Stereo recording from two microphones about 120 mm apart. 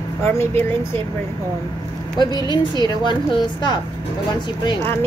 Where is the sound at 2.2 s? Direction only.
35° left (ahead or behind).